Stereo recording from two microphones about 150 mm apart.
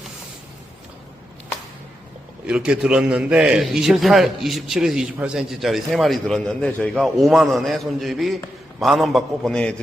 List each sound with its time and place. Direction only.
2.5 s a man's voice: 5° right (ahead or behind)